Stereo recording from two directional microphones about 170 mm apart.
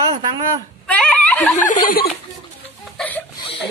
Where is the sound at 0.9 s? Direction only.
10° left (ahead or behind).